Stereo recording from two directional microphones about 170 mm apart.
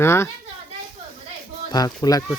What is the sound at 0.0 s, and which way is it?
Speech, 15° left (ahead or behind).